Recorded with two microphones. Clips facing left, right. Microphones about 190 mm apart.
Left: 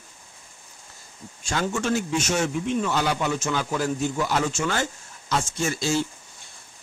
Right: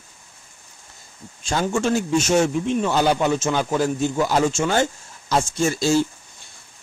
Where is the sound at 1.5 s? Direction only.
35° right (ahead or behind).